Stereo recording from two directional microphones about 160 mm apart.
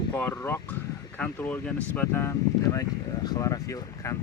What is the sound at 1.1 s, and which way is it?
Speech, 10° left (ahead or behind).